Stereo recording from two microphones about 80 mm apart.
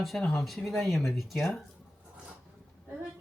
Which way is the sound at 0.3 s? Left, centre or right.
Centre.